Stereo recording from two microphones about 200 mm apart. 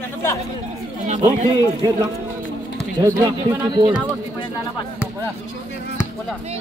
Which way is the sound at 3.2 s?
20° right (ahead or behind).